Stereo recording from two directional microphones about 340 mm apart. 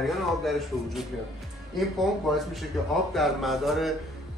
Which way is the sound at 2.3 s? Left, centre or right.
Centre.